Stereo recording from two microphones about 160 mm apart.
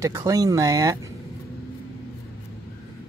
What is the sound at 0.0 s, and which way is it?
Speech, 20° right (ahead or behind).